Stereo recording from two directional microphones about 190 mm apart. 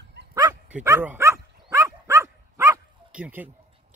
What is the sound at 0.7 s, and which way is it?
Dog, 10° right (ahead or behind).